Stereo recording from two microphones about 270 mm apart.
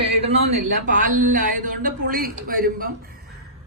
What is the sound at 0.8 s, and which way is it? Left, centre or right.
Speech, right.